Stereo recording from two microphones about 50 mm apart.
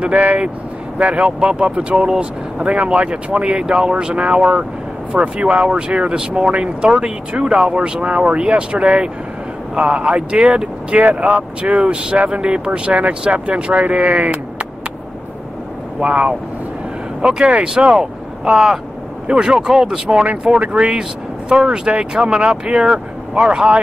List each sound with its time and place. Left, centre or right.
0.0 s speech: right
16.0 s speech: right
20.5 s speech: right